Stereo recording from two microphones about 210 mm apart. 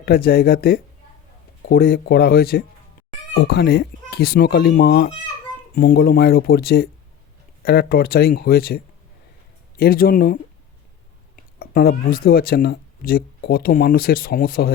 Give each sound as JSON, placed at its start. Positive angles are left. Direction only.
{"t": 0.0, "sound": "speech", "side_deg": 45}
{"t": 11.6, "sound": "speech", "side_deg": 45}